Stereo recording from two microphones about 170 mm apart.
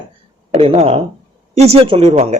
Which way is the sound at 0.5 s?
35° right (ahead or behind).